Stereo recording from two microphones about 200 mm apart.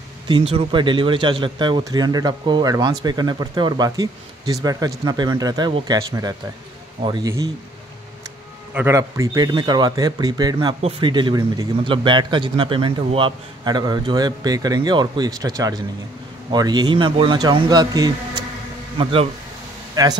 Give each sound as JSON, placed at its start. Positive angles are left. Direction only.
{"t": 0.3, "sound": "a man's voice", "side_deg": -25}
{"t": 8.7, "sound": "a man's voice", "side_deg": -15}